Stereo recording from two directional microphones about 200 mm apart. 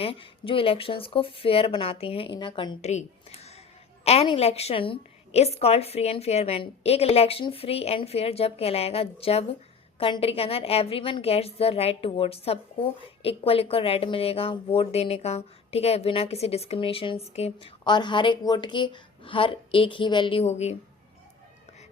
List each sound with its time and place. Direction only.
0.0 s a woman's voice: 25° left (ahead or behind)
2.9 s a sound: 30° left (ahead or behind)
4.0 s a woman's voice: 30° left (ahead or behind)